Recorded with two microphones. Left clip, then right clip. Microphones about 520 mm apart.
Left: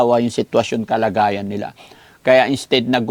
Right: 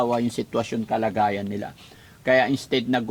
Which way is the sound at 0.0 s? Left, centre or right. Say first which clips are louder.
Left 8 dB; left.